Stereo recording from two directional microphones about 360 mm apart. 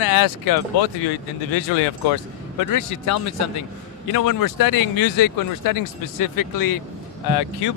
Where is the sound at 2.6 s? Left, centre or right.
Left.